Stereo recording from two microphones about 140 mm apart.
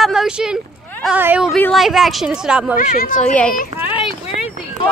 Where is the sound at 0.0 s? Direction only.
5° right (ahead or behind).